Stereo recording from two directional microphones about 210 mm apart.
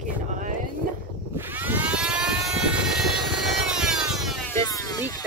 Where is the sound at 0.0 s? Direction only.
35° right (ahead or behind).